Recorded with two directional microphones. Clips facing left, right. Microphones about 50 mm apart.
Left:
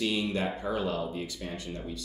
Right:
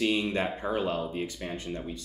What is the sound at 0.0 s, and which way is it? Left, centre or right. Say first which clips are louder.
Speech: right 2 dB; right.